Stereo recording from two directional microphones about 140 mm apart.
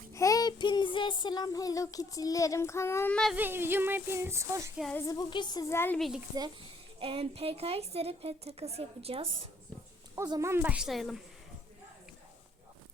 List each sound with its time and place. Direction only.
0.1 s child singing: 25° left (ahead or behind)
3.3 s speech: 15° right (ahead or behind)
4.9 s child singing: 25° left (ahead or behind)
6.0 s a woman's voice: 5° right (ahead or behind)
7.0 s a woman's voice: 45° right (ahead or behind)
10.4 s a woman's voice: 15° right (ahead or behind); by 11.2 s centre (ahead or behind)